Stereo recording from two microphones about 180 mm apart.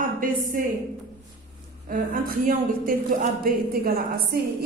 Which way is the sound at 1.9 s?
50° right (ahead or behind).